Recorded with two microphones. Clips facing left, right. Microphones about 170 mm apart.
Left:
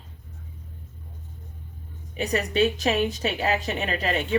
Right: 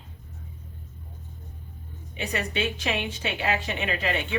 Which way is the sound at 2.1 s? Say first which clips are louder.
Left 5 dB; 40° left (ahead or behind).